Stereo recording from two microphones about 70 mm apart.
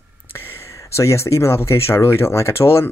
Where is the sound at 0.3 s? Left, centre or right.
Left.